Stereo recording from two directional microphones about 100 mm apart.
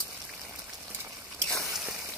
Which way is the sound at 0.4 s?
20° right (ahead or behind).